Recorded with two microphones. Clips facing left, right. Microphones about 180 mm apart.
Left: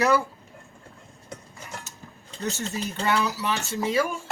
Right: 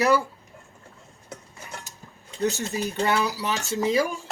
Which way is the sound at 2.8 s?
15° right (ahead or behind).